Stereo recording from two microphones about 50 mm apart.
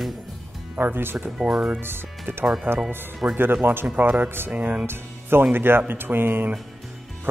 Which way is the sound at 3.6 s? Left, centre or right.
Right.